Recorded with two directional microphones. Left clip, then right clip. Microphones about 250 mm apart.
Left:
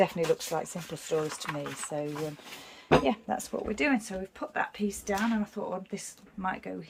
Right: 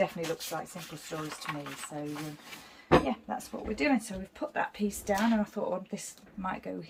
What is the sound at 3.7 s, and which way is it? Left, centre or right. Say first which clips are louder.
Speech: even; centre.